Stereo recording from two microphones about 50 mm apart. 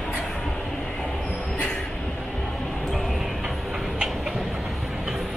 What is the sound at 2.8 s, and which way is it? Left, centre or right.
Music, centre.